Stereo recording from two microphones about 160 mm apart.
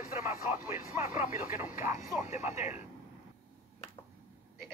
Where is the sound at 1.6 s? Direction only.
55° left (ahead or behind).